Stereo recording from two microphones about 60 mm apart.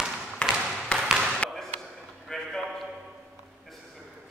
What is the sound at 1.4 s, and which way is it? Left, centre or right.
Basketball bounce, centre.